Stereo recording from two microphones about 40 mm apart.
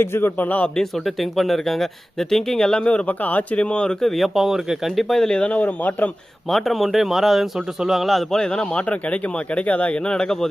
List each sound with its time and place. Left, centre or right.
0.0 s a man's voice: left
0.3 s a man's voice: left
0.8 s speech: centre
2.8 s speech: left
3.1 s speech: left
4.0 s speech: centre
4.9 s speech: centre
5.5 s speech: left
6.5 s speech: centre
8.4 s speech: left
10.0 s speech: centre